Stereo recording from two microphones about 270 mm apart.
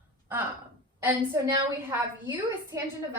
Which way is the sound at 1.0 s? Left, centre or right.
Centre.